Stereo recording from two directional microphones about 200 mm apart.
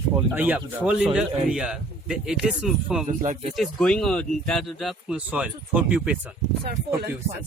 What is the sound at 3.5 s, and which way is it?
A man's voice, 5° left (ahead or behind).